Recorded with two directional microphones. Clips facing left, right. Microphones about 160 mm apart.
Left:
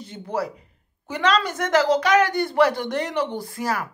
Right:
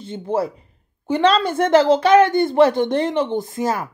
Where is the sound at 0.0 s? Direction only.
25° right (ahead or behind).